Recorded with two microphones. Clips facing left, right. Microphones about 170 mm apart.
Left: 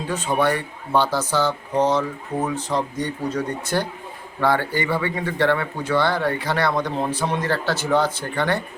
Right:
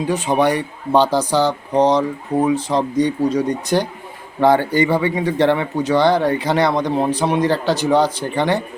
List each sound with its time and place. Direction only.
0.1 s speech: 15° right (ahead or behind)